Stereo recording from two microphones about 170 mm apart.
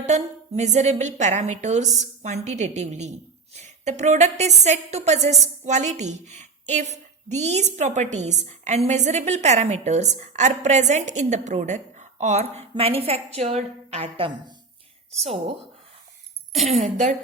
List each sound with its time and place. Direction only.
0.0 s a woman's voice: 40° right (ahead or behind)
16.7 s a woman's voice: 45° right (ahead or behind)